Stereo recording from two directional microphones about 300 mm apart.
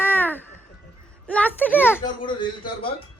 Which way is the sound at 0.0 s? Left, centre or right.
Centre.